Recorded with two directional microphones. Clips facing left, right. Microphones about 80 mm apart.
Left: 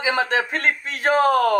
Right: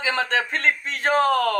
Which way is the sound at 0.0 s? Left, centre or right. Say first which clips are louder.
Left 2 dB; centre.